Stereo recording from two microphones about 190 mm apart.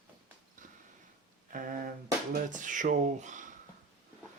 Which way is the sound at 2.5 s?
40° right (ahead or behind).